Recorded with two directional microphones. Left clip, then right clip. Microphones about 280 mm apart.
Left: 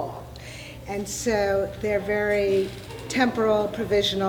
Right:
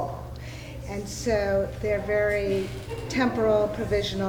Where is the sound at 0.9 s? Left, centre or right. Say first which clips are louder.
Left 1 dB; left.